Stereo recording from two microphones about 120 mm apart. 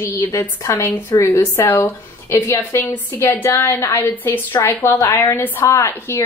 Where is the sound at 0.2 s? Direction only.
20° left (ahead or behind).